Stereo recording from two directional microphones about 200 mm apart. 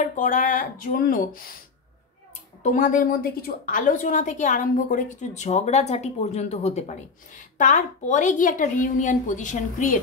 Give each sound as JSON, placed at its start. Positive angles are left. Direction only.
{"t": 0.0, "sound": "speech", "side_deg": 40}
{"t": 2.6, "sound": "a woman's voice", "side_deg": 40}